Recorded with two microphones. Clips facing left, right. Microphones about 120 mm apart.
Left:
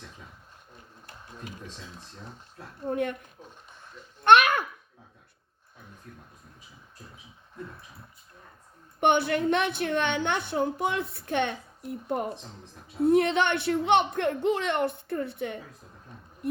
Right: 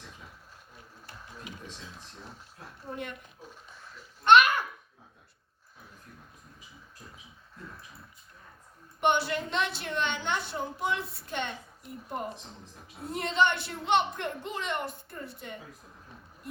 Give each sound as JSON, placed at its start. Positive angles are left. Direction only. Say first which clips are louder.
{"t": 2.9, "sound": "speech", "louder": "left 10 dB", "side_deg": 50}
{"t": 4.2, "sound": "babbling", "louder": "left 1 dB", "side_deg": 55}
{"t": 9.0, "sound": "a woman's voice", "louder": "left 4 dB", "side_deg": 55}